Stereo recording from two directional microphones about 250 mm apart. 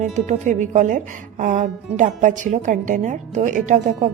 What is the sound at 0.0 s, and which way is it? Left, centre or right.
A woman's voice, right.